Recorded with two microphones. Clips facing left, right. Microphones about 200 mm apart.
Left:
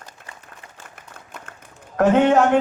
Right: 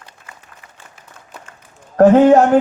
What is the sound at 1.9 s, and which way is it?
Speech, 35° right (ahead or behind).